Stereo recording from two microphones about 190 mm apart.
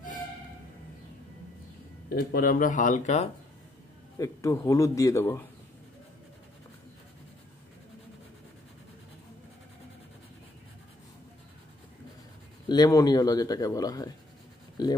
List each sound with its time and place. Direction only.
2.0 s speech: 50° left (ahead or behind)
4.2 s a man's voice: 15° left (ahead or behind)
12.6 s speech: 20° left (ahead or behind)